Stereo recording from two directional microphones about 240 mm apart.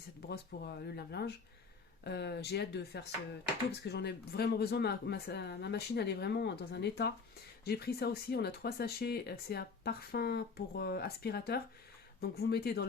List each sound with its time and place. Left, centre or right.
0.3 s speech: left